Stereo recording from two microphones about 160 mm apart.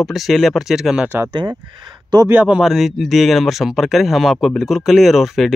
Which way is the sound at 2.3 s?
10° right (ahead or behind).